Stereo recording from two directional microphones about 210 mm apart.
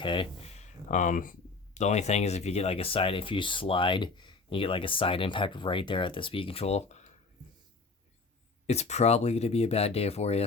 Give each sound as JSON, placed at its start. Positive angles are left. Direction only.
{"t": 0.0, "sound": "speech", "side_deg": 25}
{"t": 8.6, "sound": "speech", "side_deg": 30}